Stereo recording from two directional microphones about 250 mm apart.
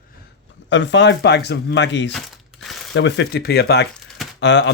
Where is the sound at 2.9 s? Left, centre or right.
Left.